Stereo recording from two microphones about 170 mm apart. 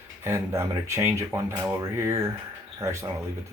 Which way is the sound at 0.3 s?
15° right (ahead or behind).